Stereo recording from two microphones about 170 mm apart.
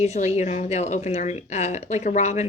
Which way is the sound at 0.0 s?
40° left (ahead or behind).